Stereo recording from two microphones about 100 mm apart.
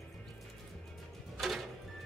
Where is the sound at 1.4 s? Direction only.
Centre (ahead or behind).